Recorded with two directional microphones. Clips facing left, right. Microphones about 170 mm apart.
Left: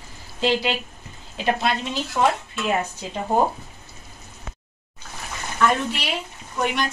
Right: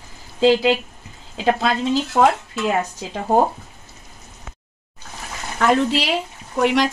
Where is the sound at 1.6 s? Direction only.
90° right.